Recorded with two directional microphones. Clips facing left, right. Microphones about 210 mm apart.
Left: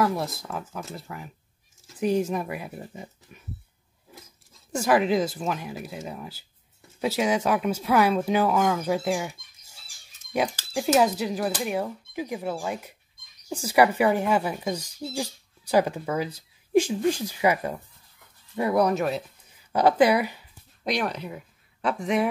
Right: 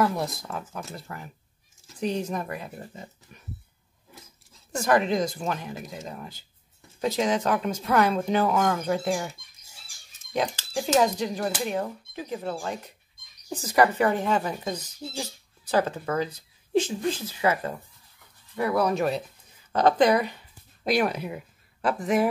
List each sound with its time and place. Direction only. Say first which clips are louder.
0.0 s speech: even; centre (ahead or behind)
4.7 s speech: left 1 dB; 5° left (ahead or behind)
10.3 s speech: left 1 dB; 10° left (ahead or behind)
18.9 s speech: right 1 dB; centre (ahead or behind)
20.8 s speech: right 3 dB; 5° right (ahead or behind)